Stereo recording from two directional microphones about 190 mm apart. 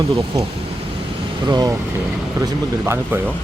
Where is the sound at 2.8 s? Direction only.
10° right (ahead or behind).